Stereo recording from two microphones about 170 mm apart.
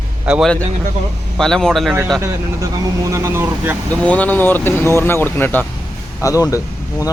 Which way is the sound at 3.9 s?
10° left (ahead or behind).